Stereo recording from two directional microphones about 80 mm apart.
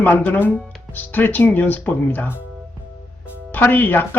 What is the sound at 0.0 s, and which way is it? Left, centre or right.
Speech, left.